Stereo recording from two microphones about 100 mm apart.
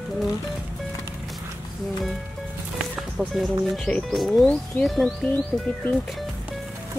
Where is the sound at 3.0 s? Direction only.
Centre (ahead or behind).